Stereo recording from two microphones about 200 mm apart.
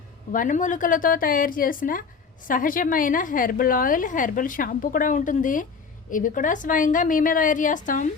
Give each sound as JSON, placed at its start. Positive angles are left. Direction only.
{"t": 0.3, "sound": "a woman's voice", "side_deg": 40}